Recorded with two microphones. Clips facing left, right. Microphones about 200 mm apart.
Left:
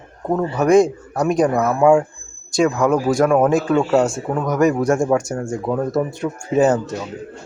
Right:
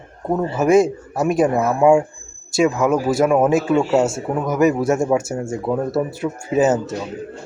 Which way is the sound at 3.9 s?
25° right (ahead or behind).